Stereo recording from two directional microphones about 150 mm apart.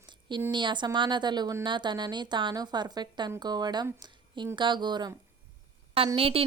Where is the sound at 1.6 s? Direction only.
30° right (ahead or behind).